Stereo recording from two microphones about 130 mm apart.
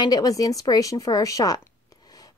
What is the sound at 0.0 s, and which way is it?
Speech, 30° left (ahead or behind).